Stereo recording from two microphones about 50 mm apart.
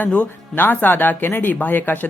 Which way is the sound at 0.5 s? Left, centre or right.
Left.